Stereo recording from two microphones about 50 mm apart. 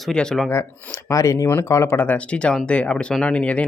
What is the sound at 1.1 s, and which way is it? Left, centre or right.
Speech, left.